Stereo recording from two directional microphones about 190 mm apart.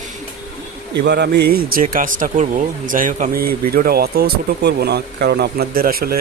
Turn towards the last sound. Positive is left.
turn(degrees=-50)  # may be behind; listen again after turning